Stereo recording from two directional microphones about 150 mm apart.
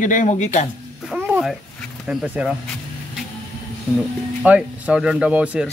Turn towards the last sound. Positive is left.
turn(degrees=-10)  # may be behind; listen again after turning